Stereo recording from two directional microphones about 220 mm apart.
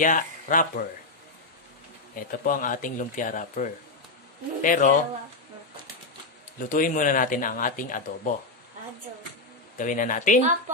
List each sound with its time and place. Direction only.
0.0 s speech: 35° left (ahead or behind)
2.1 s speech: 40° left (ahead or behind)
6.7 s speech: 35° left (ahead or behind)
9.8 s speech: 35° left (ahead or behind)